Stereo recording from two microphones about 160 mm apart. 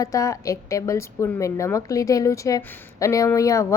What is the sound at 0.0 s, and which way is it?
A woman's voice, 20° left (ahead or behind).